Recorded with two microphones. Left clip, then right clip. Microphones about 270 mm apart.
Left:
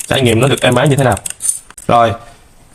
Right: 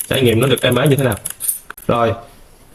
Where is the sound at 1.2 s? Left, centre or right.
Centre.